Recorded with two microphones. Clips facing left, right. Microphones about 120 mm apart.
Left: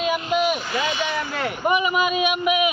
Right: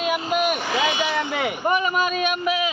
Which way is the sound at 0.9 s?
15° right (ahead or behind).